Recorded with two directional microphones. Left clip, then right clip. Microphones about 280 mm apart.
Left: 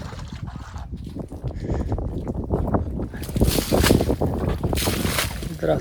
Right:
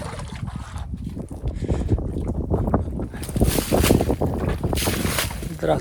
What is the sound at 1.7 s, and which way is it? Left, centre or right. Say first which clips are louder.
Boat: right 2 dB; centre.